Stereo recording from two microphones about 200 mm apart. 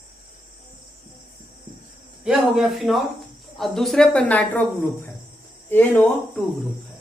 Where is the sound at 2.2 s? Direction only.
Centre (ahead or behind).